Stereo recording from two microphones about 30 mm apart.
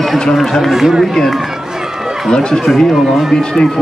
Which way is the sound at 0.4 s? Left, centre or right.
Centre.